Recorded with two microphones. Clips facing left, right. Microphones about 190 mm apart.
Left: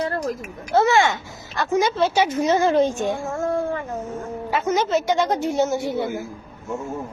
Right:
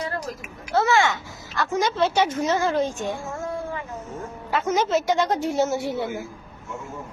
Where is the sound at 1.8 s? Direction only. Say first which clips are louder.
Left 1 dB; 5° left (ahead or behind).